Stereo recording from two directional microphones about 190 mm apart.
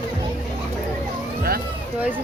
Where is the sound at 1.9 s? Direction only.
5° right (ahead or behind).